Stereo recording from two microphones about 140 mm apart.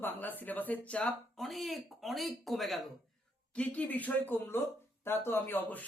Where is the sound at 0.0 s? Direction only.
15° left (ahead or behind).